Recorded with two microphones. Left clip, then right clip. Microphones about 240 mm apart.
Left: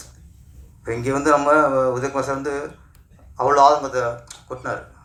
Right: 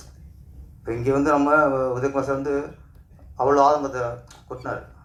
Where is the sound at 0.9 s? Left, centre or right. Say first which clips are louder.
Left 2 dB; left.